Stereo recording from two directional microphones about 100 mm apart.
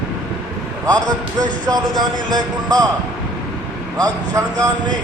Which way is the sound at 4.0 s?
35° right (ahead or behind).